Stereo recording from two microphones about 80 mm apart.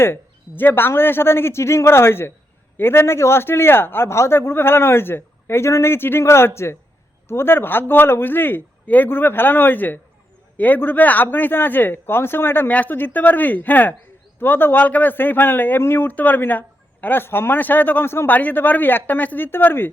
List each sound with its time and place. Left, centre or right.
0.0 s a man's voice: left